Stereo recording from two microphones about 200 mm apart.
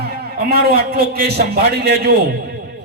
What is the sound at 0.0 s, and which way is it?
A man's voice, 50° right (ahead or behind).